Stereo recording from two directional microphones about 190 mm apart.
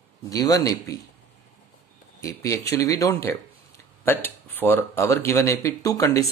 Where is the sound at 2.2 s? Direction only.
15° left (ahead or behind).